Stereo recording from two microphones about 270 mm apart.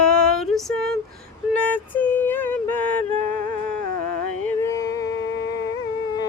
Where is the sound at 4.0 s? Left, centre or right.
Left.